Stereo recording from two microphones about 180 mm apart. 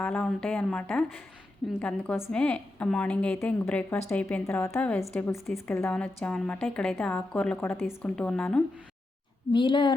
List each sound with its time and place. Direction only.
0.0 s a woman's voice: 5° left (ahead or behind)
9.5 s speech: 25° left (ahead or behind)